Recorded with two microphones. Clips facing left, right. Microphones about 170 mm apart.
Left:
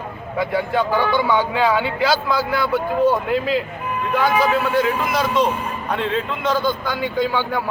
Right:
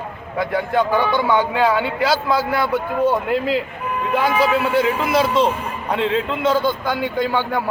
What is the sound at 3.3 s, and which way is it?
Speech, 70° right (ahead or behind).